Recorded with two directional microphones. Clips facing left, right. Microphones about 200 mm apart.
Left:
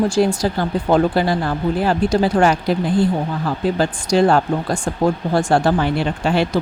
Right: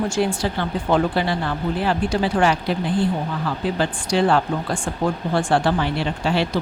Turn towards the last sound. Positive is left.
turn(degrees=50)  # may be behind; listen again after turning